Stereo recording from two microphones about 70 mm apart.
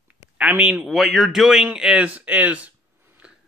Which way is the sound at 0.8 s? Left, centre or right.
Centre.